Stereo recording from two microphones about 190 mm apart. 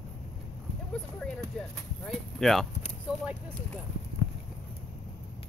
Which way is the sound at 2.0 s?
Centre (ahead or behind).